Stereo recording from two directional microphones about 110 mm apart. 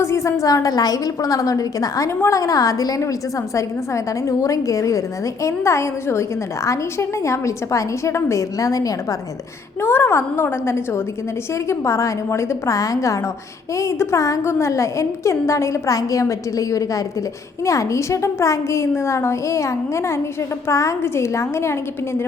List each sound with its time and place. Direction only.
0.0 s a woman's voice: 25° left (ahead or behind)
9.8 s a woman's voice: 20° left (ahead or behind)